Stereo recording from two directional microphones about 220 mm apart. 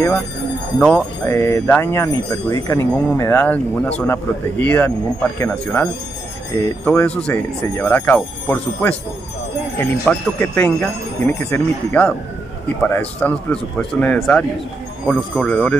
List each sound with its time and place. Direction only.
0.7 s speech: 5° left (ahead or behind)